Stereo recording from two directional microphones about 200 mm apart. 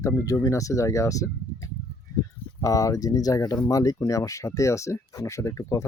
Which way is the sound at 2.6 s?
15° left (ahead or behind).